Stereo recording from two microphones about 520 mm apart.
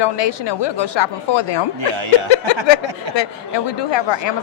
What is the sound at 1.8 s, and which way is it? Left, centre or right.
Speech, right.